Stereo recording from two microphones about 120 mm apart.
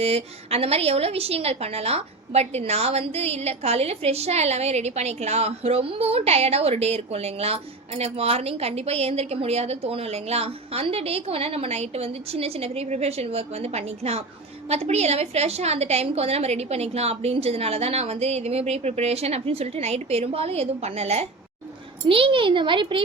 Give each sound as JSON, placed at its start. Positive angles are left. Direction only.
{"t": 0.0, "sound": "a woman's voice", "side_deg": -60}
{"t": 22.1, "sound": "speech", "side_deg": -45}